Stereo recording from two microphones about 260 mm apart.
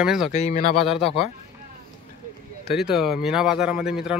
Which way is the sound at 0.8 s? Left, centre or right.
Centre.